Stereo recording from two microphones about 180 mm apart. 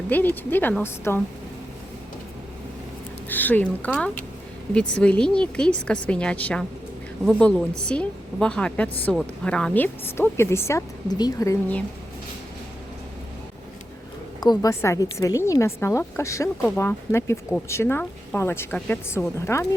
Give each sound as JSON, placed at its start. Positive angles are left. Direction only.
{"t": 0.1, "sound": "a woman's voice", "side_deg": 10}
{"t": 3.2, "sound": "a woman's voice", "side_deg": 10}
{"t": 14.4, "sound": "a woman's voice", "side_deg": 20}